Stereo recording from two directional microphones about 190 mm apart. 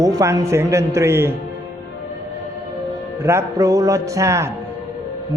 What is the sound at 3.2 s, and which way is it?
A man's voice, 15° right (ahead or behind).